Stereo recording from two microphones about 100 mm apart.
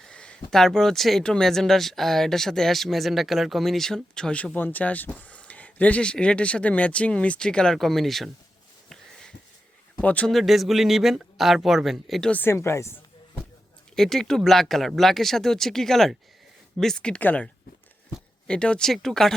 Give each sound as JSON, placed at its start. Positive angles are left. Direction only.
{"t": 0.0, "sound": "a sound", "side_deg": 10}
{"t": 0.5, "sound": "speech", "side_deg": 5}
{"t": 8.9, "sound": "wheeze", "side_deg": 5}
{"t": 10.0, "sound": "speech", "side_deg": 15}
{"t": 10.3, "sound": "speech", "side_deg": 0}
{"t": 12.3, "sound": "speech", "side_deg": 20}
{"t": 13.9, "sound": "speech", "side_deg": 5}